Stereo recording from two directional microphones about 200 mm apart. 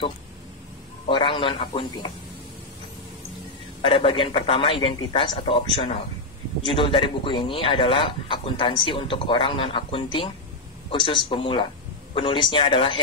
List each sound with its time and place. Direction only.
1.0 s speech: 25° left (ahead or behind)
3.8 s speech: 25° left (ahead or behind)